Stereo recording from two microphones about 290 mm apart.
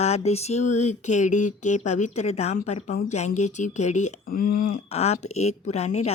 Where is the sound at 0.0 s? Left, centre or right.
Left.